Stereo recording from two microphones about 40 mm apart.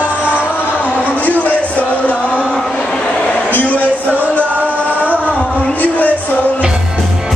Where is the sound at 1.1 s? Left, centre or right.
Left.